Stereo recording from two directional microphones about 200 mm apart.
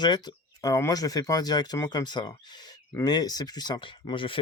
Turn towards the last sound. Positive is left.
turn(degrees=25)  # may be behind; listen again after turning